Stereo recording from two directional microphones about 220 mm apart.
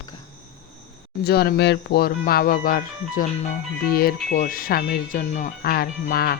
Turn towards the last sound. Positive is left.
turn(degrees=45)  # may be behind; listen again after turning